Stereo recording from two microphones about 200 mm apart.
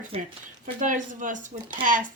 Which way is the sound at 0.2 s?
40° right (ahead or behind).